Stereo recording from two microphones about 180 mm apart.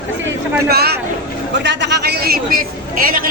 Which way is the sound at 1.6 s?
75° right (ahead or behind).